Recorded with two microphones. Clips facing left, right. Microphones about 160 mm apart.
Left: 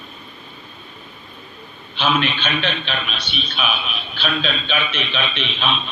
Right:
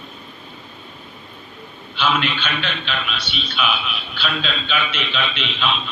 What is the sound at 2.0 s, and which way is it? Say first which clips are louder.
A man's voice: left 1 dB; 40° left (ahead or behind).